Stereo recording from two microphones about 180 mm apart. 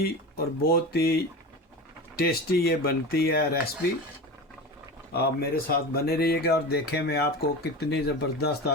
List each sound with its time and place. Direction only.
0.0 s speech: 55° left (ahead or behind)
2.1 s speech: 60° left (ahead or behind)
5.1 s speech: 55° left (ahead or behind)